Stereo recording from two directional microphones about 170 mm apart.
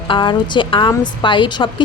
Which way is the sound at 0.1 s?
30° left (ahead or behind).